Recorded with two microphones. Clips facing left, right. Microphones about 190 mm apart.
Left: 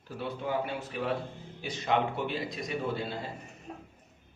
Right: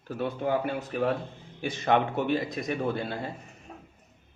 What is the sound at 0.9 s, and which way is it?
A man's voice, 45° right (ahead or behind).